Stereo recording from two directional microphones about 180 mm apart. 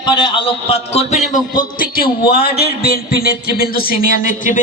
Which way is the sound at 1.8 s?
55° left (ahead or behind).